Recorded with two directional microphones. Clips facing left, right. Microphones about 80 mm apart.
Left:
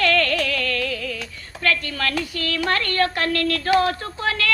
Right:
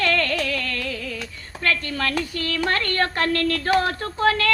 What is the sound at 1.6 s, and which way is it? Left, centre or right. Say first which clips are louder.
A woman's voice: left 1 dB; right.